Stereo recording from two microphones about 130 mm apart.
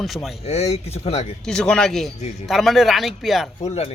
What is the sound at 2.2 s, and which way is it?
Speech, 60° left (ahead or behind).